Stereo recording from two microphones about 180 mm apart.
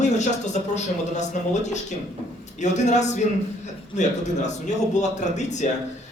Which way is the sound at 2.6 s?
40° left (ahead or behind).